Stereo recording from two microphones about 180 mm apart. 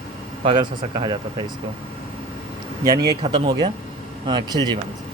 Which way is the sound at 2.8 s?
20° right (ahead or behind).